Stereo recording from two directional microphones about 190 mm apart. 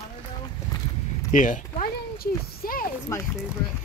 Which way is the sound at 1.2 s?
45° left (ahead or behind).